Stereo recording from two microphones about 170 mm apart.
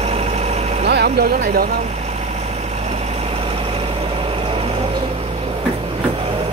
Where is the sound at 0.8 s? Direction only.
75° right (ahead or behind); by 1.7 s 60° right (ahead or behind).